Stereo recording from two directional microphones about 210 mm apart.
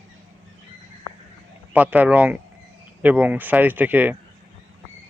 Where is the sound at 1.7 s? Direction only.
10° right (ahead or behind).